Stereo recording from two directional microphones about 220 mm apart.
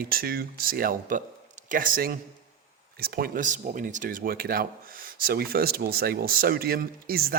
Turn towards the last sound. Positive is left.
turn(degrees=-45)  # may be behind; listen again after turning